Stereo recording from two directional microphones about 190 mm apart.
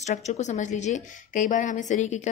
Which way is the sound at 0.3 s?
40° left (ahead or behind).